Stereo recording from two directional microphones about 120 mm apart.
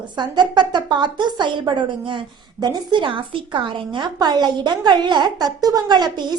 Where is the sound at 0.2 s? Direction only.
40° right (ahead or behind).